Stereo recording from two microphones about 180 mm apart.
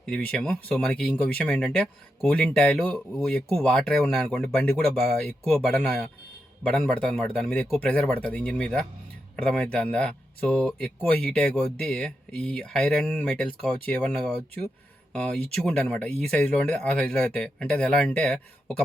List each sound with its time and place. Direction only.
0.0 s speech: 5° left (ahead or behind)